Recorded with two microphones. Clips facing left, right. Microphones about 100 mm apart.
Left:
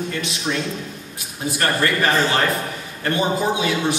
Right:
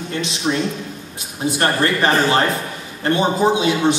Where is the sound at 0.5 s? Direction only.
30° right (ahead or behind).